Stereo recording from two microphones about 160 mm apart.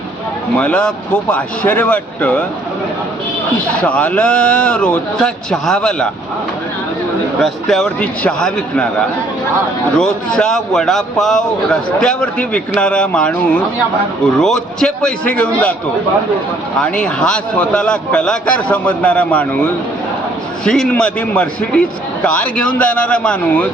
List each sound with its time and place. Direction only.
0.6 s a man's voice: 5° left (ahead or behind)
3.8 s a man's voice: 10° left (ahead or behind)
7.4 s a man's voice: centre (ahead or behind)
10.0 s a man's voice: 5° left (ahead or behind)
14.3 s a man's voice: 5° left (ahead or behind)
16.8 s a man's voice: 5° left (ahead or behind)
20.7 s a man's voice: 5° left (ahead or behind)